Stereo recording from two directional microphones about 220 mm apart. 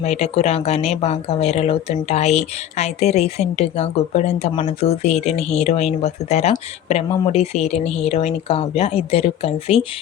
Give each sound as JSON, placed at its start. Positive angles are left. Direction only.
{"t": 0.0, "sound": "speech", "side_deg": 30}